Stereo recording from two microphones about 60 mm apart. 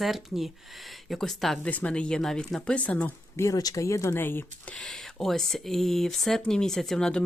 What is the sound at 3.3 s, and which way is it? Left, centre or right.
Speech, left.